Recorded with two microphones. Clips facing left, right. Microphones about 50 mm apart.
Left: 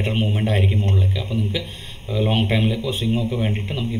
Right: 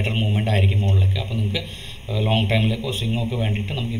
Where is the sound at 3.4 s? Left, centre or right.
Centre.